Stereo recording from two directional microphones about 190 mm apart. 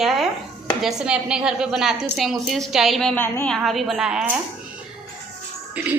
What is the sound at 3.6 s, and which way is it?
Speech, centre (ahead or behind).